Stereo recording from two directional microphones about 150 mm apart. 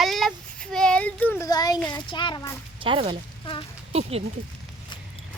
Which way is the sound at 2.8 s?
35° right (ahead or behind).